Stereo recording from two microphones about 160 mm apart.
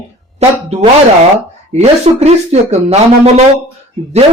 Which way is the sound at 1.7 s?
45° right (ahead or behind).